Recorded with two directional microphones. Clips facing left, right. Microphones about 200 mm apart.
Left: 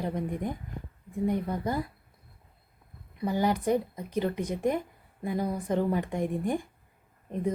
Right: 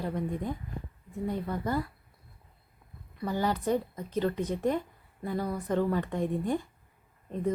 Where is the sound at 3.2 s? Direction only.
15° left (ahead or behind).